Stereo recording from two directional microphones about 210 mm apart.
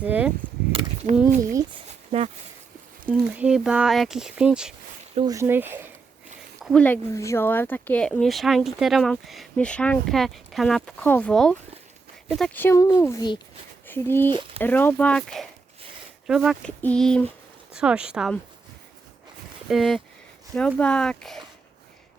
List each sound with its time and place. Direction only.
0.0 s speech: 5° right (ahead or behind)
1.4 s speech: 15° right (ahead or behind)
3.1 s speech: 5° right (ahead or behind)
5.1 s speech: 20° right (ahead or behind)
6.6 s speech: 5° left (ahead or behind)
14.3 s speech: 20° right (ahead or behind)
14.6 s speech: 10° left (ahead or behind)
19.6 s speech: centre (ahead or behind)